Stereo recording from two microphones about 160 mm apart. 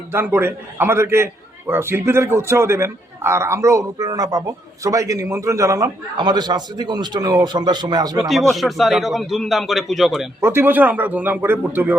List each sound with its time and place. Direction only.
0.1 s a man's voice: 15° right (ahead or behind)
8.3 s a man's voice: centre (ahead or behind)
10.4 s a man's voice: 15° right (ahead or behind)